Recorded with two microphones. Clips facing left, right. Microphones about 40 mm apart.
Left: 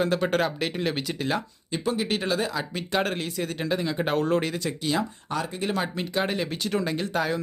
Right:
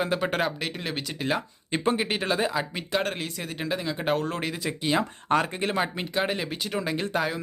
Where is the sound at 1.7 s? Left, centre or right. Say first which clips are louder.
Right 2 dB; right.